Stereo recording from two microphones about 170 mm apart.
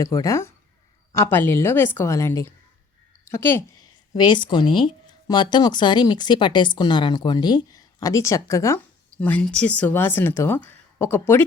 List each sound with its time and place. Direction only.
0.0 s a woman's voice: 20° left (ahead or behind)
4.1 s speech: 25° left (ahead or behind)